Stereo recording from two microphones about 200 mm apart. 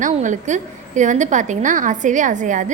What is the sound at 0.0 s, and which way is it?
A woman's voice, 40° right (ahead or behind).